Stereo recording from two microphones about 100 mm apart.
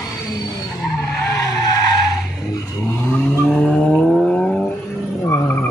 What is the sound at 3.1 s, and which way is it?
Vehicle, 10° left (ahead or behind).